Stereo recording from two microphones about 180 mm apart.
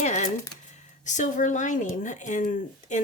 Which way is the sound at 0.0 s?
40° left (ahead or behind).